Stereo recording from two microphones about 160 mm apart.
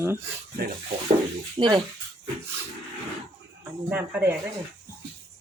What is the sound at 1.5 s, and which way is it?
Speech, 25° right (ahead or behind).